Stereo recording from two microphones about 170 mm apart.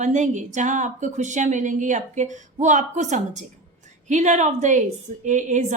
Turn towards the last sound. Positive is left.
turn(degrees=-45)  # may be behind; listen again after turning